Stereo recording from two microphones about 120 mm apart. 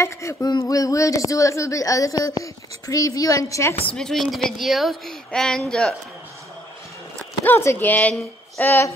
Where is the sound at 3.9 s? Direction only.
5° left (ahead or behind).